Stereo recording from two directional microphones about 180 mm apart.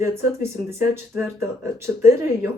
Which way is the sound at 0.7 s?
15° right (ahead or behind).